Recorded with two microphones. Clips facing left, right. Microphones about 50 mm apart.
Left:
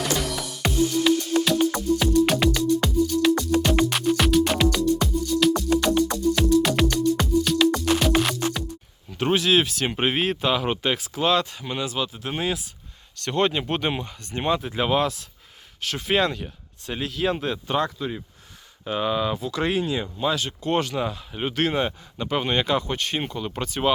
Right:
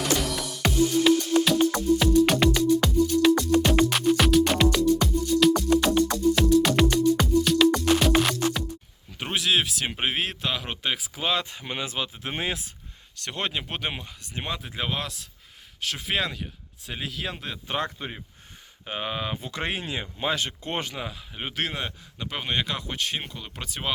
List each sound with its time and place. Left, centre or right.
0.3 s music: centre
9.1 s speech: centre
11.5 s speech: right
13.2 s speech: centre
17.7 s speech: right
21.0 s speech: centre